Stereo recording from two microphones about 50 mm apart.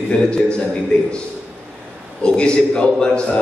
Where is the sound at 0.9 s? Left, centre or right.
Centre.